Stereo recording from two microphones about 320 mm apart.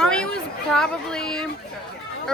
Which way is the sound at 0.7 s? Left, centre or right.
Centre.